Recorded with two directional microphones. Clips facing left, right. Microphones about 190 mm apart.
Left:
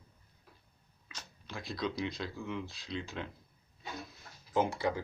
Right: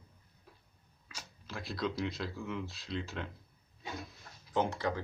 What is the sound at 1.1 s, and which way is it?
Speech, 5° right (ahead or behind).